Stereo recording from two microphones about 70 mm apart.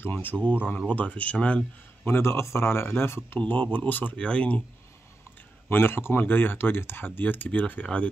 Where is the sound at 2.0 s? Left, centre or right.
Left; by 4.6 s centre.